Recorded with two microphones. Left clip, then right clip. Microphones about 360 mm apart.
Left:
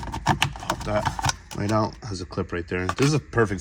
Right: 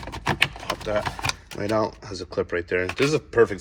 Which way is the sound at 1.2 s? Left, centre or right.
Centre.